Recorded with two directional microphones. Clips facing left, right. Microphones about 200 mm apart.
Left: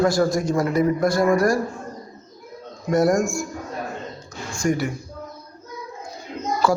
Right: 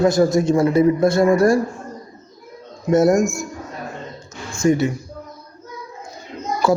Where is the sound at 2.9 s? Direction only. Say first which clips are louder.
Right 4 dB; 20° right (ahead or behind).